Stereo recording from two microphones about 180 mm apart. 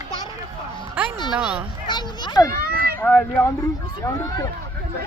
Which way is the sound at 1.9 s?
25° left (ahead or behind).